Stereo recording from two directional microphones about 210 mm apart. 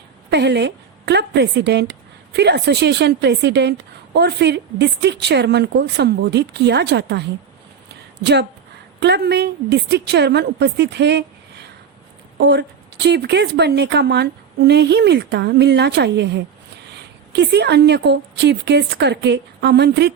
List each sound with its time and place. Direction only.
0.3 s a woman's voice: 55° right (ahead or behind)
12.4 s a woman's voice: 55° right (ahead or behind)